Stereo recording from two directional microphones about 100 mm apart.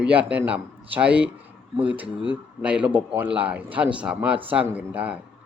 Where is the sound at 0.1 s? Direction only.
15° right (ahead or behind).